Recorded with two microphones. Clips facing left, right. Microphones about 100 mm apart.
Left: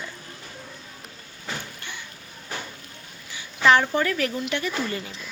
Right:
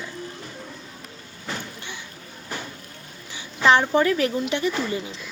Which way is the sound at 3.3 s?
25° right (ahead or behind).